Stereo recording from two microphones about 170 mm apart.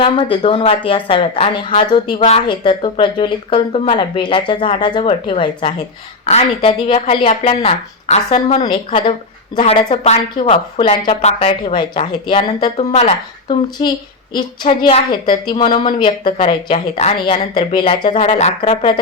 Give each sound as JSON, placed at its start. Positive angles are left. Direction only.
{"t": 0.0, "sound": "speech", "side_deg": 30}
{"t": 6.2, "sound": "speech", "side_deg": 40}
{"t": 13.8, "sound": "speech", "side_deg": 25}
{"t": 18.1, "sound": "speech", "side_deg": 40}